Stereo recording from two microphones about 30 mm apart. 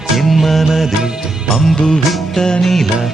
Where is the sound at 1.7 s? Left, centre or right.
Left.